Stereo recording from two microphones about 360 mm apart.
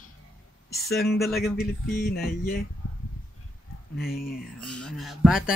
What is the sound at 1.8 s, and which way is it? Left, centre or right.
Speech, left.